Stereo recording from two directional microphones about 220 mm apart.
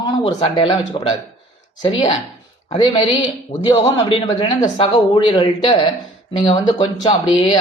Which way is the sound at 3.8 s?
25° left (ahead or behind).